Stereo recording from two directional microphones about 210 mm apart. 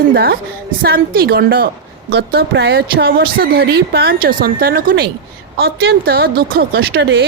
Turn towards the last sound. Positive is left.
turn(degrees=-50)  # may be behind; listen again after turning